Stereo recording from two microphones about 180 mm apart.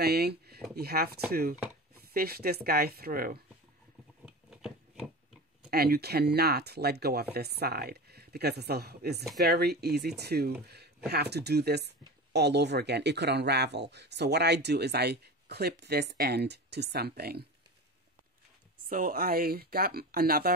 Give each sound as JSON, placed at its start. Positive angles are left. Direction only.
{"t": 0.0, "sound": "speech", "side_deg": -65}
{"t": 4.5, "sound": "a sound", "side_deg": 0}
{"t": 5.7, "sound": "speech", "side_deg": -60}
{"t": 18.9, "sound": "speech", "side_deg": -50}